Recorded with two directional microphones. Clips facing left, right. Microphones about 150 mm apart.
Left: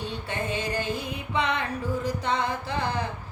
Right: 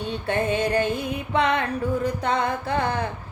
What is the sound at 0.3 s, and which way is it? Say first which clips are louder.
Music: right 8 dB; 60° right (ahead or behind).